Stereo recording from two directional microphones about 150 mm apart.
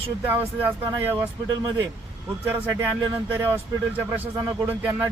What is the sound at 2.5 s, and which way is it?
Speech, 10° right (ahead or behind).